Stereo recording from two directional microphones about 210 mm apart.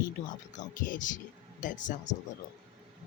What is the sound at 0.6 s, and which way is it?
Speech, 40° left (ahead or behind).